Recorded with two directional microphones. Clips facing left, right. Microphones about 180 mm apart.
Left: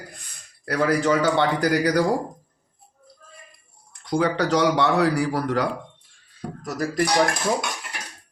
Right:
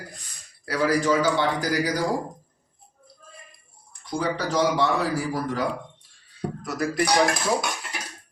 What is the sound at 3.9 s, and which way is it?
A man's voice, 70° left (ahead or behind).